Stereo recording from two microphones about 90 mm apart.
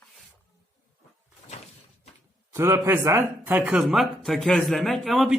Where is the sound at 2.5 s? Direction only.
30° right (ahead or behind).